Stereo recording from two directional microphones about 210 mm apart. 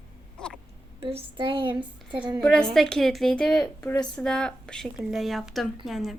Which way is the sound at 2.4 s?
5° left (ahead or behind).